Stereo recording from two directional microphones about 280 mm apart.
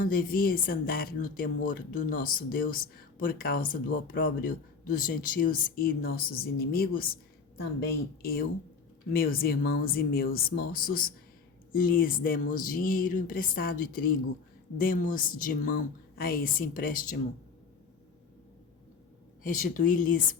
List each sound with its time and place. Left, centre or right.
0.0 s speech: left
19.4 s speech: left